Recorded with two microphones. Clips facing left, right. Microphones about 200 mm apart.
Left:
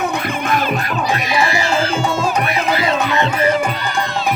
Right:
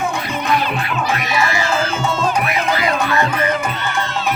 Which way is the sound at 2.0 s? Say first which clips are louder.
Left 1 dB; 10° left (ahead or behind).